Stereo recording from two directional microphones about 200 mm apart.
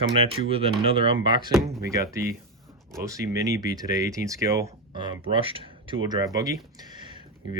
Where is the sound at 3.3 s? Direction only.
15° right (ahead or behind).